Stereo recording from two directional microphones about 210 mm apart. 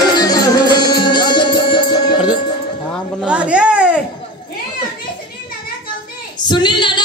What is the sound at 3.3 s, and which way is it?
Baby cry, 5° right (ahead or behind).